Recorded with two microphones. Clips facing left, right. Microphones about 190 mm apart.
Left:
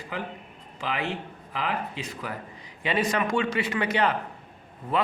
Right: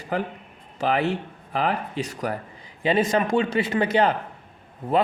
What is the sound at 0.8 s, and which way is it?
Speech, 40° right (ahead or behind).